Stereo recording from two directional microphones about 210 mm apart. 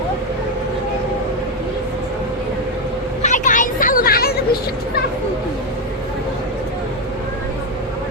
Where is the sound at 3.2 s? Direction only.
35° left (ahead or behind).